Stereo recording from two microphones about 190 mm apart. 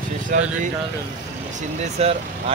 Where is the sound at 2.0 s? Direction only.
35° right (ahead or behind).